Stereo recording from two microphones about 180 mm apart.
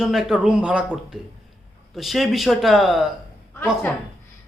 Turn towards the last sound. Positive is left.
turn(degrees=10)  # may be behind; listen again after turning